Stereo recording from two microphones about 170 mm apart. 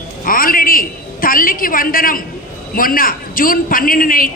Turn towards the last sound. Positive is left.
turn(degrees=55)  # may be behind; listen again after turning